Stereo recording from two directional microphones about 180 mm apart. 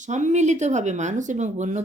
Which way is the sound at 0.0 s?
40° right (ahead or behind).